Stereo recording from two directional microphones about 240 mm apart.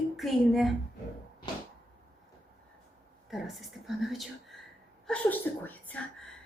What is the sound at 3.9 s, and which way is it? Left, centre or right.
A woman's voice, centre.